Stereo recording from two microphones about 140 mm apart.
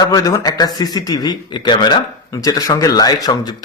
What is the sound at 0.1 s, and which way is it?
Speech, 25° left (ahead or behind).